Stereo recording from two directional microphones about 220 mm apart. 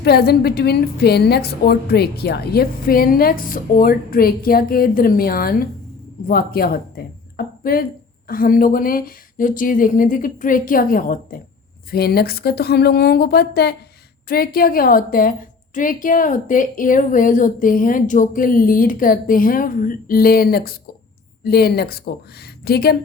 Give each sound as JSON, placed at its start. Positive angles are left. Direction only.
{"t": 0.0, "sound": "a woman's voice", "side_deg": 45}